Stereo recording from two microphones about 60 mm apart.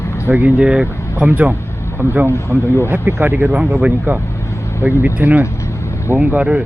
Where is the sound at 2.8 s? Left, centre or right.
Right.